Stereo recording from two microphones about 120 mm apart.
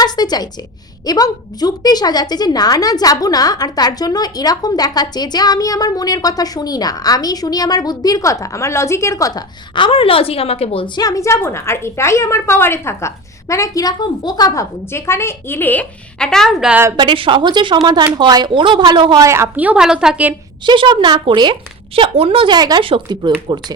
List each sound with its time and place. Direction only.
0.0 s a woman's voice: 35° left (ahead or behind)
9.7 s a woman's voice: 45° left (ahead or behind)
10.9 s a woman's voice: 30° left (ahead or behind); by 16.7 s centre (ahead or behind)
17.0 s speech: 45° right (ahead or behind)
19.2 s a woman's voice: 20° right (ahead or behind)
20.7 s speech: 45° right (ahead or behind)